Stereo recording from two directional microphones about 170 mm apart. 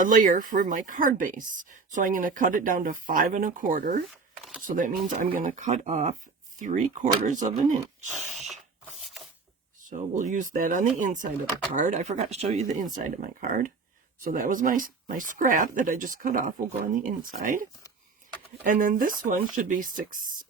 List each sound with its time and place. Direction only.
0.0 s speech: 50° right (ahead or behind)
8.1 s sneeze: centre (ahead or behind)
9.0 s mechanisms: centre (ahead or behind)
9.8 s speech: 45° right (ahead or behind)
13.1 s speech: 50° right (ahead or behind)